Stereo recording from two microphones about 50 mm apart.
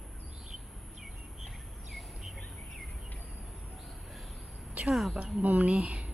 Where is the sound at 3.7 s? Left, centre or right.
Centre.